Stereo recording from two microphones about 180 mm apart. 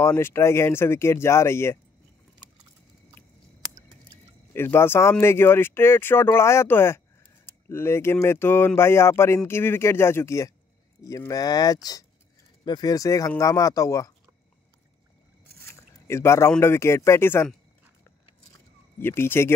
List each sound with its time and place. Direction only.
0.0 s speech: 15° left (ahead or behind)
4.6 s speech: 10° left (ahead or behind)
15.6 s speech: 15° left (ahead or behind)
18.9 s speech: 10° left (ahead or behind)